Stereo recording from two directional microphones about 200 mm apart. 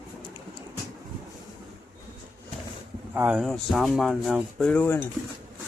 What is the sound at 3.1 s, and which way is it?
Speech, 10° right (ahead or behind).